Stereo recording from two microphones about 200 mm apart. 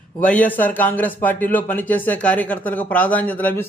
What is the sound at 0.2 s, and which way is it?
A man's voice, 5° left (ahead or behind).